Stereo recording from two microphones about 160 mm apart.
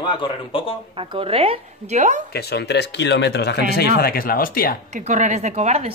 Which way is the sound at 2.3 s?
90° left.